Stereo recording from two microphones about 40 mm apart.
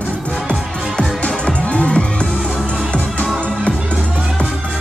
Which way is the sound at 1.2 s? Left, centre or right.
Left.